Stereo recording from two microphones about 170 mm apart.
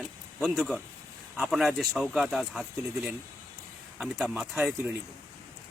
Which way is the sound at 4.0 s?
5° right (ahead or behind).